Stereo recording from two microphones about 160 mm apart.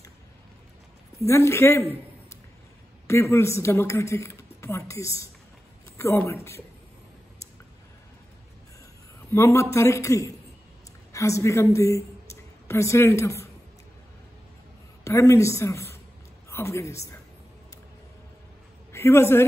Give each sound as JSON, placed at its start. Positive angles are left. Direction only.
{"t": 1.2, "sound": "a woman's voice", "side_deg": 15}
{"t": 3.1, "sound": "a woman's voice", "side_deg": 15}
{"t": 9.3, "sound": "a woman's voice", "side_deg": 15}
{"t": 15.0, "sound": "a woman's voice", "side_deg": 20}
{"t": 18.9, "sound": "a man's voice", "side_deg": 15}